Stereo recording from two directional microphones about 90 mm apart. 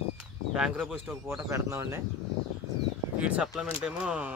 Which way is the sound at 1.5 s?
30° right (ahead or behind).